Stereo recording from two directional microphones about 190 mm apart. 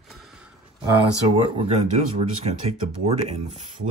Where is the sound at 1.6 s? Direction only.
30° right (ahead or behind).